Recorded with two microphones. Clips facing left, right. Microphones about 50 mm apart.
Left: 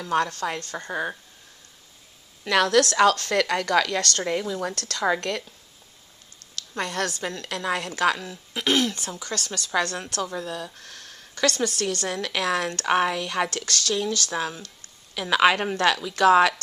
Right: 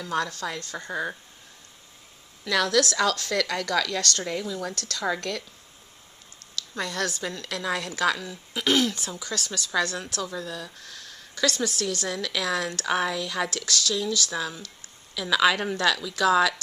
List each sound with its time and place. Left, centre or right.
0.0 s a woman's voice: left
2.4 s a woman's voice: left
6.8 s a woman's voice: left
8.6 s speech: left
9.5 s a woman's voice: left